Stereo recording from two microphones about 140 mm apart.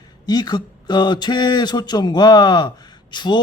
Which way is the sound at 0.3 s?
30° left (ahead or behind).